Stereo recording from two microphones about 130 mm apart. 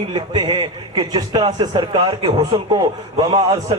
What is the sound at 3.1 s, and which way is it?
Speech, 30° right (ahead or behind).